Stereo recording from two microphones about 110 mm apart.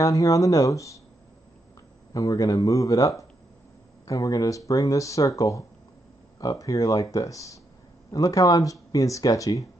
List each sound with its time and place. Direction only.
0.0 s speech: 30° left (ahead or behind)
2.1 s speech: 30° left (ahead or behind)